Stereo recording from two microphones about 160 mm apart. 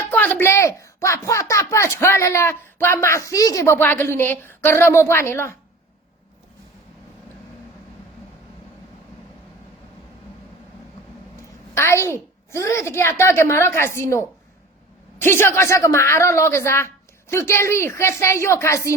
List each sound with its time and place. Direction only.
0.1 s speech: 10° left (ahead or behind)
11.7 s speech: 15° left (ahead or behind)